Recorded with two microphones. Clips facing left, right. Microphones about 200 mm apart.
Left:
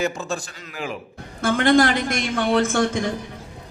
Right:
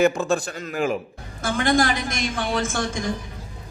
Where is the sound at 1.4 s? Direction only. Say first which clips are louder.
Left 4 dB; 60° left (ahead or behind).